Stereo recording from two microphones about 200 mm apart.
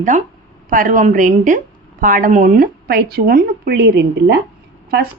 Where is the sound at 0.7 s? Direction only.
40° right (ahead or behind).